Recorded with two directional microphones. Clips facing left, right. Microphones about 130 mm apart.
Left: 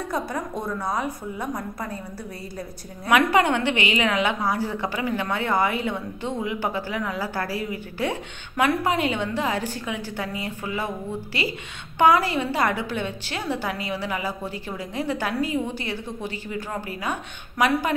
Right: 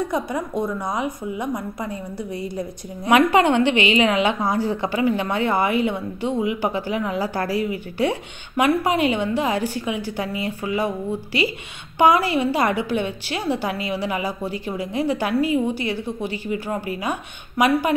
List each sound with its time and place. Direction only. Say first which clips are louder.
0.1 s a woman's voice: right 4 dB; 15° right (ahead or behind)
12.0 s a woman's voice: right 2 dB; 15° right (ahead or behind)